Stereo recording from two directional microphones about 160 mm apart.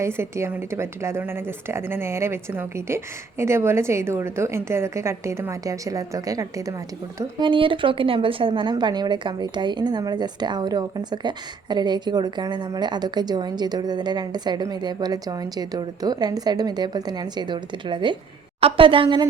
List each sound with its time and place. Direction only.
0.0 s a woman's voice: 15° right (ahead or behind)